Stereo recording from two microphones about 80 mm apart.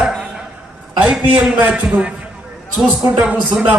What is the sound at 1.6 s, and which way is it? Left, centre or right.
Speech, centre.